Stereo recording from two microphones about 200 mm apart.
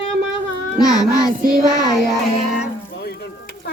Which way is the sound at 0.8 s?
20° left (ahead or behind).